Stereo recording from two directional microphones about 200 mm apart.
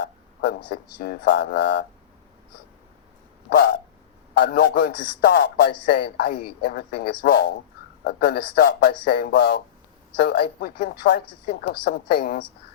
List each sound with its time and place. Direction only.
1.0 s speech: 50° left (ahead or behind)
3.5 s a sound: 55° left (ahead or behind)
4.4 s speech: 50° left (ahead or behind)